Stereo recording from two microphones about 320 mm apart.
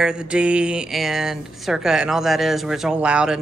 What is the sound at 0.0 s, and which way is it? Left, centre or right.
Speech, centre.